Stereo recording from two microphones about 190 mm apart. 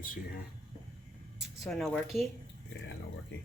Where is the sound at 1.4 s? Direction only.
Centre (ahead or behind).